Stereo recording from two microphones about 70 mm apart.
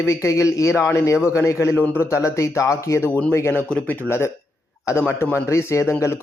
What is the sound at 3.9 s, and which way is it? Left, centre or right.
Speech, left.